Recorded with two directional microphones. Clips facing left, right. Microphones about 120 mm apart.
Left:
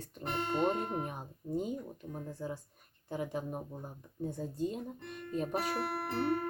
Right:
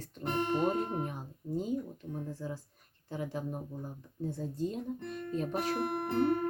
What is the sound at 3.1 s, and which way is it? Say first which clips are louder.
Speech: even; 10° left (ahead or behind).